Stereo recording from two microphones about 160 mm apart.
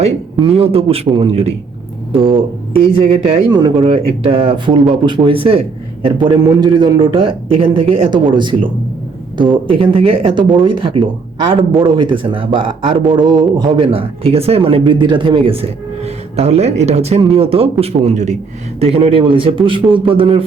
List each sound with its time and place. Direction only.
0.0 s a man's voice: 40° right (ahead or behind)
3.5 s a man's voice: 25° right (ahead or behind)